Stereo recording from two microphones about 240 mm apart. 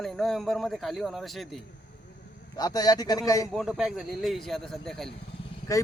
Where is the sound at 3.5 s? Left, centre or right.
Centre.